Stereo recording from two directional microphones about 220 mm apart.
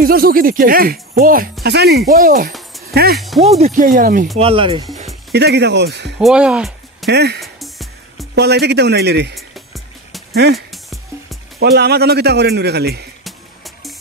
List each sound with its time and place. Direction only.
0.0 s a man's voice: 40° right (ahead or behind)
3.2 s speech: centre (ahead or behind)
3.4 s speech: 30° right (ahead or behind)
4.4 s speech: 25° right (ahead or behind)
5.3 s a man's voice: 50° right (ahead or behind)
6.1 s a sound: centre (ahead or behind)
7.1 s a man's voice: 50° right (ahead or behind)
7.3 s music: centre (ahead or behind)
8.4 s a man's voice: 50° right (ahead or behind)
10.3 s a man's voice: 50° right (ahead or behind)
10.7 s music: centre (ahead or behind)
11.6 s a man's voice: 45° right (ahead or behind)